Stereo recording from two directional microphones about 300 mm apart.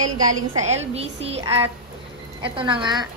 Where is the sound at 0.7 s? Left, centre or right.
Right.